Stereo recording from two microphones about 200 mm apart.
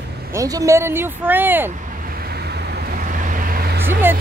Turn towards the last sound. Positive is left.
turn(degrees=-10)  # may be behind; listen again after turning